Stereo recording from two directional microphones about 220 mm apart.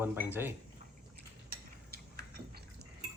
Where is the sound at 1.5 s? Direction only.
40° right (ahead or behind).